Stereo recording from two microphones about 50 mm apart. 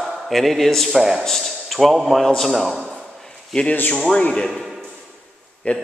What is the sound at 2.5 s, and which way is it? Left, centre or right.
Speech, centre.